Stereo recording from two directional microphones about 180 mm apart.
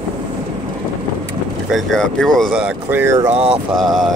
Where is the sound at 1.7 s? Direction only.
5° left (ahead or behind).